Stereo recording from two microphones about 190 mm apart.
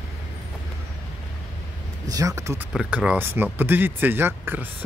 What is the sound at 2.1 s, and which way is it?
A man's voice, 15° right (ahead or behind).